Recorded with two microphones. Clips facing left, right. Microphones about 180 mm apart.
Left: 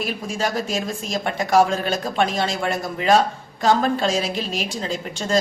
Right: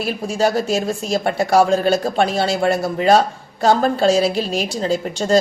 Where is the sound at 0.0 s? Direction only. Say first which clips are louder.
Right 6 dB; 35° right (ahead or behind).